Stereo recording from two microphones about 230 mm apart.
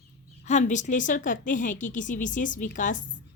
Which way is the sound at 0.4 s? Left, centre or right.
Left.